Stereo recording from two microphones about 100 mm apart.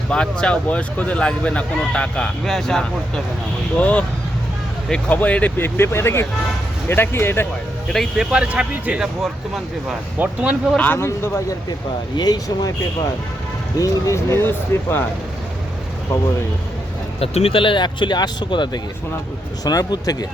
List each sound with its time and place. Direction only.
0.1 s speech: 10° left (ahead or behind)
7.9 s speech: 5° right (ahead or behind)
10.8 s speech: 20° left (ahead or behind)
12.1 s speech: 40° left (ahead or behind); by 15.0 s 20° left (ahead or behind)
17.2 s speech: 85° left; by 20.1 s 40° left (ahead or behind)